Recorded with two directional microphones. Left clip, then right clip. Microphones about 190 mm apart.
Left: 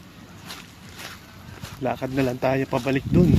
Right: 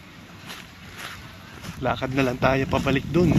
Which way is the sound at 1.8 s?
15° left (ahead or behind).